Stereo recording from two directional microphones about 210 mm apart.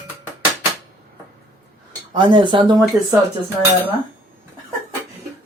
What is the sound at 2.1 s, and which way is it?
Speech, 20° right (ahead or behind).